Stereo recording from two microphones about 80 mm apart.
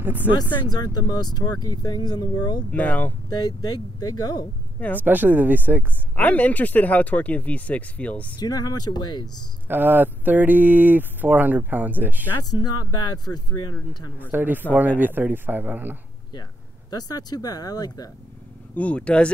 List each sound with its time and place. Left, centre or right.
0.0 s speech: right
0.7 s speech: left
2.7 s speech: centre
3.3 s speech: left
4.7 s a woman's voice: centre
5.0 s speech: right
6.1 s speech: centre
8.4 s speech: left
9.7 s speech: right
12.4 s speech: left
14.1 s speech: right
16.9 s speech: left
18.8 s speech: centre